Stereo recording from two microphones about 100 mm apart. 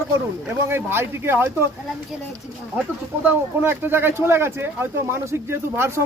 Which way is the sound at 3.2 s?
20° right (ahead or behind).